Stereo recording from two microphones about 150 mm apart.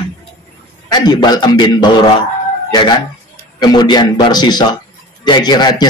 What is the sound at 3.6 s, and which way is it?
A man's voice, 30° left (ahead or behind).